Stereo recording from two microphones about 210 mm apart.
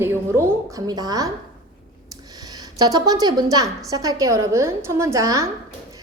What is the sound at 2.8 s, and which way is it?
A woman's voice, 15° right (ahead or behind).